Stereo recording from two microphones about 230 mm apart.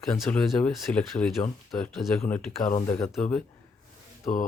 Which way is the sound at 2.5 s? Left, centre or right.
Left.